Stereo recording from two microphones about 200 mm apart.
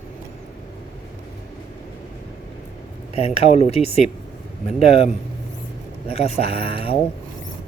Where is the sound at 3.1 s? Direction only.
30° left (ahead or behind).